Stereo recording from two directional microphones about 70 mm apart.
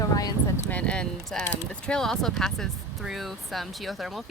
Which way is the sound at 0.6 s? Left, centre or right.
Centre.